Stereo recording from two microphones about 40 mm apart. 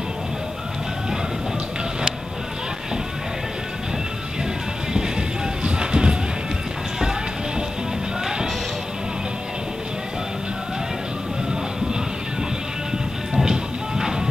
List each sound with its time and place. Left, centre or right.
4.9 s music: centre
13.5 s music: centre